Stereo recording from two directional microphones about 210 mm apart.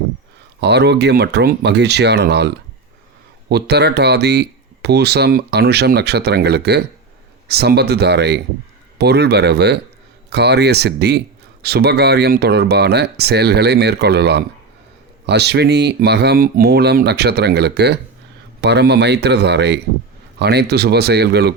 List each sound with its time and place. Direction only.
0.6 s speech: 55° right (ahead or behind)
3.5 s speech: 50° right (ahead or behind)